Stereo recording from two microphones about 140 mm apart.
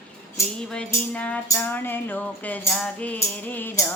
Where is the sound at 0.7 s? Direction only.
10° left (ahead or behind).